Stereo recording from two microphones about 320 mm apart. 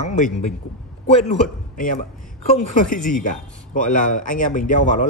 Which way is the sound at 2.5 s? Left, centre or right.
Left.